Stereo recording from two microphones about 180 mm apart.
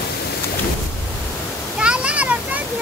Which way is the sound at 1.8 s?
5° right (ahead or behind).